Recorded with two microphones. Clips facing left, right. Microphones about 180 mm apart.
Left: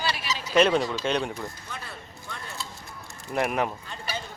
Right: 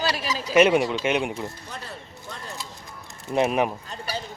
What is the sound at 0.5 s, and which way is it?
Speech, 10° right (ahead or behind).